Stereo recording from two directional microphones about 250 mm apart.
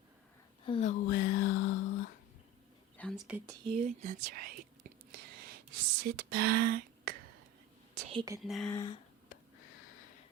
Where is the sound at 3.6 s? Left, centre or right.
Right.